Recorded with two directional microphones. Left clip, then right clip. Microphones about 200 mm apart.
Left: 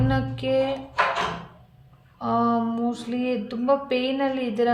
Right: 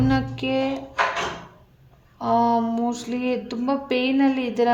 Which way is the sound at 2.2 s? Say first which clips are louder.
Right 3 dB; 35° right (ahead or behind).